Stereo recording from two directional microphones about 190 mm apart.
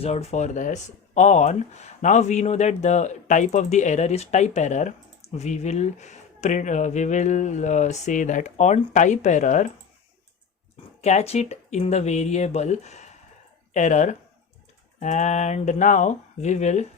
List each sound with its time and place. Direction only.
0.0 s speech: 35° left (ahead or behind)
11.0 s speech: 35° left (ahead or behind)